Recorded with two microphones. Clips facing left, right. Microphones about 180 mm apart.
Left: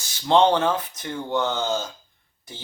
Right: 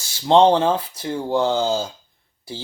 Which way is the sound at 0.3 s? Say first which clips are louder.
Right 4 dB; 30° right (ahead or behind).